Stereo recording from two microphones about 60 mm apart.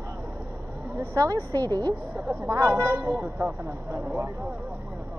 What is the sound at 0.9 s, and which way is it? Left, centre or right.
Speech, right.